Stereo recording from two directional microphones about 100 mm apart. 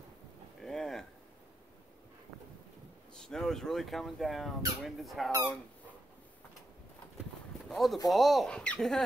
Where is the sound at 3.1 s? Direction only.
5° left (ahead or behind).